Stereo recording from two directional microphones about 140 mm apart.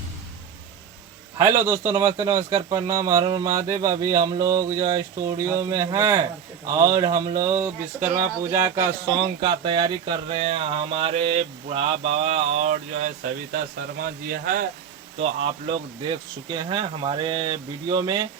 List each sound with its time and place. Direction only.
1.4 s speech: 15° right (ahead or behind)
9.0 s speech: 35° right (ahead or behind); by 13.6 s 60° right (ahead or behind)
14.3 s speech: 90° right
15.2 s speech: 45° right (ahead or behind)